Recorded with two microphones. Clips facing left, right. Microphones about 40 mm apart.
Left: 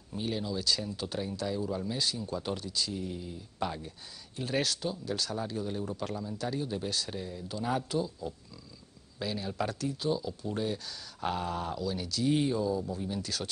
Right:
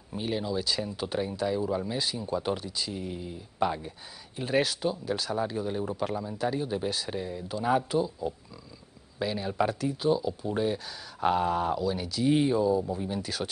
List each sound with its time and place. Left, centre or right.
0.1 s speech: centre